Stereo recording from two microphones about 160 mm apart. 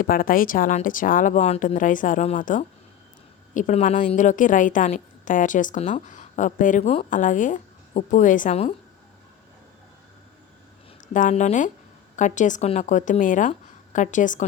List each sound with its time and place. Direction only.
0.0 s a woman's voice: 60° left (ahead or behind)
6.8 s a woman's voice: 40° left (ahead or behind)
11.1 s a woman's voice: 50° left (ahead or behind)